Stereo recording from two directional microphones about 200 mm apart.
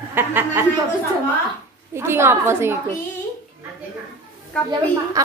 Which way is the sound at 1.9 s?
10° right (ahead or behind).